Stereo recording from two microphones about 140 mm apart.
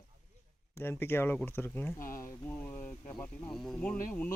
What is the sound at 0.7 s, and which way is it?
Speech, 15° left (ahead or behind).